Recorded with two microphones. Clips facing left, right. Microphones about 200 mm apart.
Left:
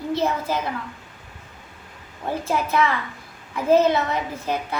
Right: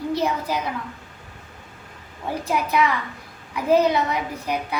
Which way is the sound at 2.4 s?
15° right (ahead or behind).